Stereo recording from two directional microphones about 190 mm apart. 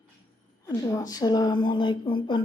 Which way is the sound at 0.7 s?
20° left (ahead or behind).